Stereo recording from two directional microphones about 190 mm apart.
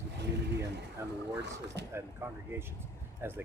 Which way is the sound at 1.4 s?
65° right (ahead or behind).